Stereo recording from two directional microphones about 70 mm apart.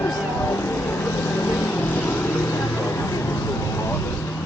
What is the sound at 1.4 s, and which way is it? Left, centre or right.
Vehicle, left.